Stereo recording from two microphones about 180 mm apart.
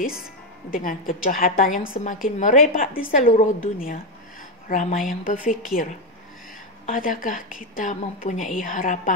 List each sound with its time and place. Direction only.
0.7 s a woman's voice: 50° left (ahead or behind)
1.8 s a woman's voice: 40° left (ahead or behind)
6.9 s a woman's voice: 50° left (ahead or behind)